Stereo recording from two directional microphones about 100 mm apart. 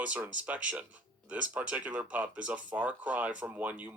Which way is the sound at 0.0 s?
15° right (ahead or behind).